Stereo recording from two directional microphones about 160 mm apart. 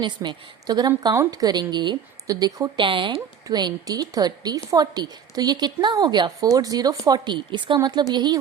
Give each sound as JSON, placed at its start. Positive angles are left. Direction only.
{"t": 0.0, "sound": "a woman's voice", "side_deg": -30}